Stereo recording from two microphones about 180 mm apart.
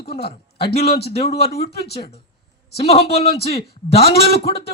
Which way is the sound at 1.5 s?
60° left (ahead or behind).